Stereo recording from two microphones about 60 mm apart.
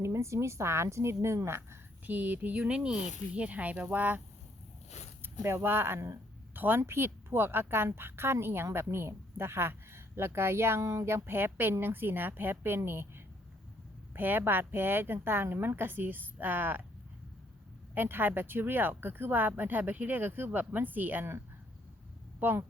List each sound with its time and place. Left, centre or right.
0.0 s a woman's voice: right
2.0 s speech: right
5.5 s a woman's voice: right
6.5 s a woman's voice: right
17.9 s a woman's voice: right
22.4 s speech: right